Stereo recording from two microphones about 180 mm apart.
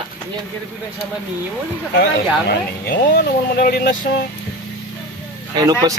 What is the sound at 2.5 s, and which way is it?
Speech, 65° left (ahead or behind).